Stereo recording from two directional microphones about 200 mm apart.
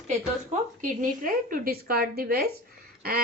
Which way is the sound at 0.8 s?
40° right (ahead or behind).